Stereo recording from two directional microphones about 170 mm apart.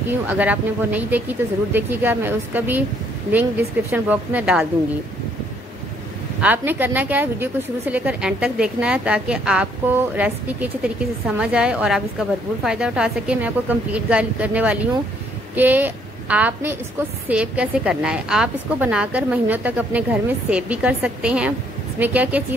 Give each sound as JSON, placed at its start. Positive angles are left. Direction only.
{"t": 0.3, "sound": "a woman's voice", "side_deg": -10}
{"t": 6.4, "sound": "a woman's voice", "side_deg": -10}